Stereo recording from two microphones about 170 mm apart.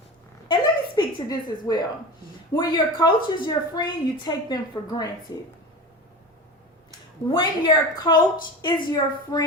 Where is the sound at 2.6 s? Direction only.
25° left (ahead or behind).